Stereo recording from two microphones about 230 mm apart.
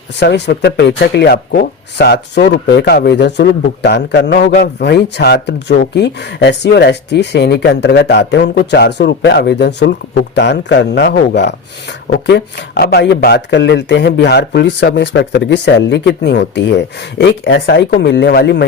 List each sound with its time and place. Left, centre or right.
0.2 s speech: left